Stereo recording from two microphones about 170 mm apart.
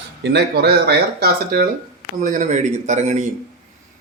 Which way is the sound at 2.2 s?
50° right (ahead or behind).